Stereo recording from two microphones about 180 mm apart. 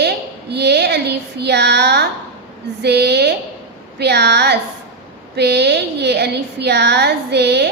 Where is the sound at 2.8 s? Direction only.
70° right (ahead or behind).